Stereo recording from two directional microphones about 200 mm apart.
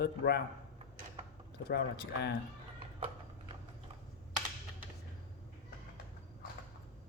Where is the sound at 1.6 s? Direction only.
55° left (ahead or behind).